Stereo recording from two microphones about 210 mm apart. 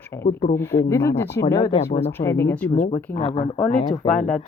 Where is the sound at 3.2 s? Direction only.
30° left (ahead or behind).